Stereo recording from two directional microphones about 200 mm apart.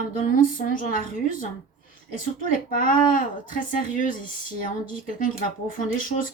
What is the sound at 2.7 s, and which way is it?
Speech, 45° left (ahead or behind).